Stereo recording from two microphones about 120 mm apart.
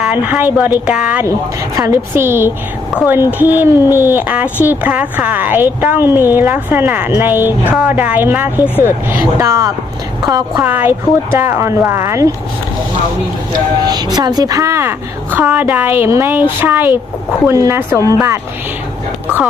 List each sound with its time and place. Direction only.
0.0 s a woman's voice: 15° right (ahead or behind)
1.7 s a woman's voice: 20° right (ahead or behind)
8.6 s speech: 20° left (ahead or behind)
9.2 s speech: 25° right (ahead or behind)
10.6 s speech: 15° right (ahead or behind)
13.8 s a woman's voice: 35° right (ahead or behind)